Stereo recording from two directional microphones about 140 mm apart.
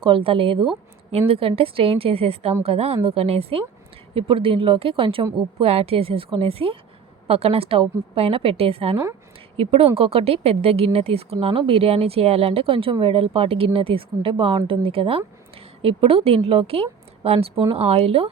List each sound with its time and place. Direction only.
0.0 s a woman's voice: 40° right (ahead or behind)